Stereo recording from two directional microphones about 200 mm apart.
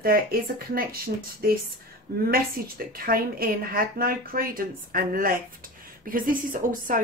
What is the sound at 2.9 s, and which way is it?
Speech, 45° right (ahead or behind).